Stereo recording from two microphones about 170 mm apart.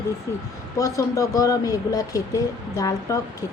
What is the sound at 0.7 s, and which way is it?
Speech, 20° left (ahead or behind).